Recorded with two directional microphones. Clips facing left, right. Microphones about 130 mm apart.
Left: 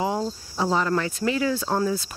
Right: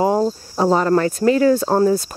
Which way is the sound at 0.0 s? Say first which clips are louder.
Right 9 dB; 45° right (ahead or behind).